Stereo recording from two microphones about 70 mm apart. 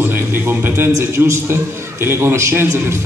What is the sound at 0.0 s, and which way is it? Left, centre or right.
A man's voice, right.